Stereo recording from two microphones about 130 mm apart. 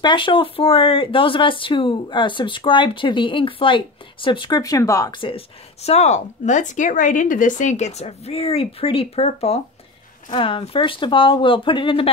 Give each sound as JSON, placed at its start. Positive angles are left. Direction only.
{"t": 0.0, "sound": "speech", "side_deg": 40}
{"t": 5.2, "sound": "a woman's voice", "side_deg": 50}